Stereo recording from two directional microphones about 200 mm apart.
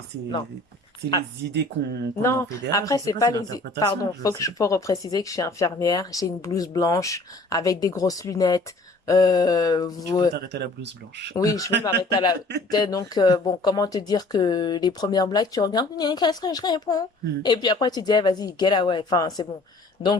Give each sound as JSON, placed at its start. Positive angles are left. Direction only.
{"t": 2.2, "sound": "speech", "side_deg": 15}
{"t": 10.3, "sound": "speech", "side_deg": -55}
{"t": 11.3, "sound": "speech", "side_deg": 15}